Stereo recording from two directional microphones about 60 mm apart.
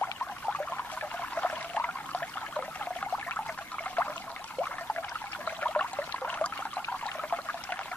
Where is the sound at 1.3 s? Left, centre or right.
Left.